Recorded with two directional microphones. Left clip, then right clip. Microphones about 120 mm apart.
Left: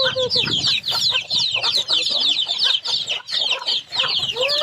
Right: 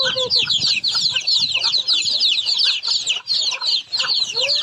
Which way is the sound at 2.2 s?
60° right (ahead or behind).